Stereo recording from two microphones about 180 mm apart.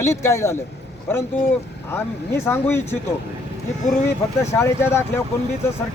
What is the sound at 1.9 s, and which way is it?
A man's voice, 15° left (ahead or behind).